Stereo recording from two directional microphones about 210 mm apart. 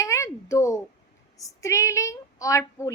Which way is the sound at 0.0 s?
15° left (ahead or behind).